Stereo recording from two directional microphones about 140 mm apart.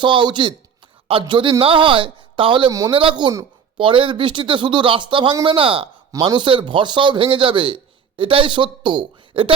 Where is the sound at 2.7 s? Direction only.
25° right (ahead or behind).